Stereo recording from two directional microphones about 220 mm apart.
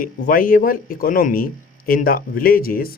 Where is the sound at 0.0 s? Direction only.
40° left (ahead or behind).